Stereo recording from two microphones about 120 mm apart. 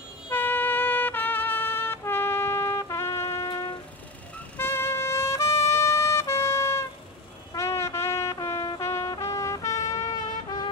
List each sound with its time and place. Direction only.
0.3 s music: 15° left (ahead or behind)
3.4 s train: 35° left (ahead or behind)
4.6 s music: 15° left (ahead or behind)
7.5 s brass instrument: 25° left (ahead or behind)
8.8 s music: 25° left (ahead or behind)
9.2 s trumpet: 25° left (ahead or behind)